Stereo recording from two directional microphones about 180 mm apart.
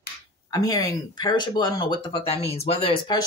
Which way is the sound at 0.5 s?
20° left (ahead or behind).